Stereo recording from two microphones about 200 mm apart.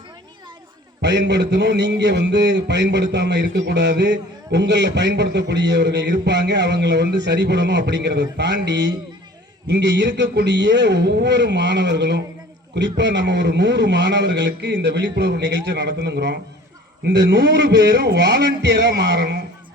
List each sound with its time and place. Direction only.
1.0 s a man's voice: 60° right (ahead or behind)